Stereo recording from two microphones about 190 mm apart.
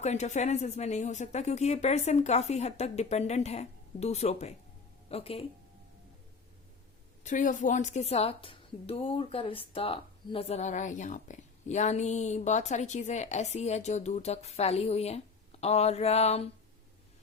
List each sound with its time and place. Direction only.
0.0 s a woman's voice: 35° left (ahead or behind)
7.3 s a woman's voice: 40° left (ahead or behind)